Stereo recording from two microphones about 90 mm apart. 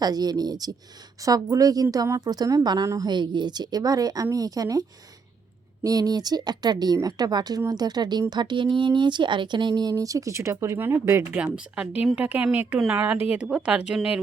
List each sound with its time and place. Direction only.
0.0 s speech: 45° right (ahead or behind)
3.1 s speech: 55° right (ahead or behind)
9.9 s speech: 40° right (ahead or behind)
11.3 s speech: 10° right (ahead or behind)